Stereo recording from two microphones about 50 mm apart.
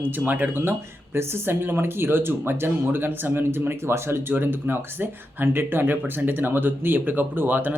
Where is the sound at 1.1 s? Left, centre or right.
Right.